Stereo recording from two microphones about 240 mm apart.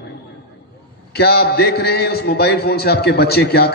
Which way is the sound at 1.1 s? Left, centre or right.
Left.